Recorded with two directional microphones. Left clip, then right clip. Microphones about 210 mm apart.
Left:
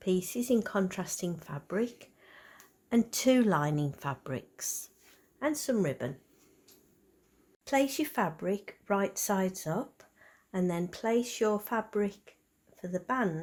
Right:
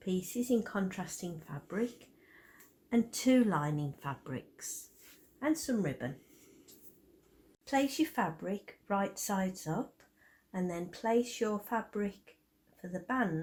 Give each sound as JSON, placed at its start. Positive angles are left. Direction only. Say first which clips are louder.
{"t": 0.0, "sound": "speech", "louder": "left 5 dB", "side_deg": 45}
{"t": 2.9, "sound": "speech", "louder": "left 3 dB", "side_deg": 45}
{"t": 7.6, "sound": "speech", "louder": "left 3 dB", "side_deg": 50}